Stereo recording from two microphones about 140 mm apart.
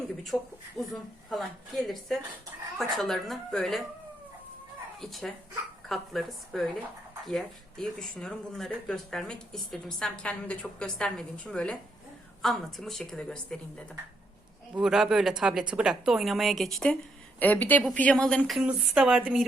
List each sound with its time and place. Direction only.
0.3 s speech: 15° left (ahead or behind)
1.3 s speech: centre (ahead or behind)
4.9 s speech: centre (ahead or behind)